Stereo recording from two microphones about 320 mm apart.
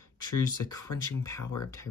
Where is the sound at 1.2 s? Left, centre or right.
Centre.